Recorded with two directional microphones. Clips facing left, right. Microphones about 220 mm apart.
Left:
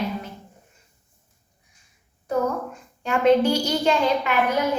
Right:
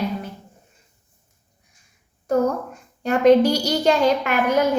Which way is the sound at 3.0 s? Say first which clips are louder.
Right 4 dB; 40° right (ahead or behind).